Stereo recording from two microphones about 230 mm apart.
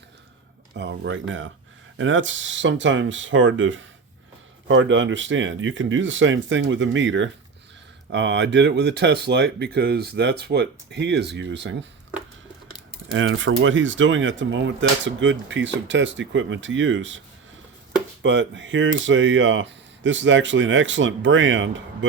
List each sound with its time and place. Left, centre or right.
0.8 s speech: right
13.1 s speech: right
18.2 s speech: right